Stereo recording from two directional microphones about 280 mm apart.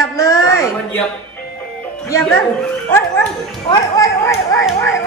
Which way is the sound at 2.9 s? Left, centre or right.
Centre.